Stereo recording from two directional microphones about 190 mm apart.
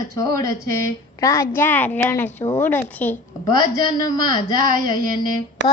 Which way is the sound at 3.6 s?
20° left (ahead or behind).